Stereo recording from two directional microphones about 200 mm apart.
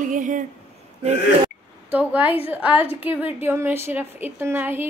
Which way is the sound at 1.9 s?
5° right (ahead or behind).